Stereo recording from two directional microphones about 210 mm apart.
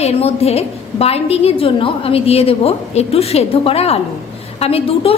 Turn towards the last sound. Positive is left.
turn(degrees=25)  # may be behind; listen again after turning